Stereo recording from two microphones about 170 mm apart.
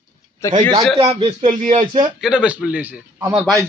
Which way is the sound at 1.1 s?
35° right (ahead or behind).